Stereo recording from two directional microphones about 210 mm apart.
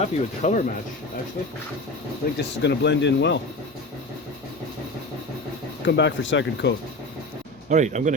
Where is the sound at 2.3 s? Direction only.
55° left (ahead or behind).